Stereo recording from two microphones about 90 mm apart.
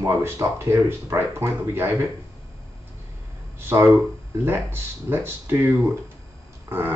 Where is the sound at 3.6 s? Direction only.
25° right (ahead or behind).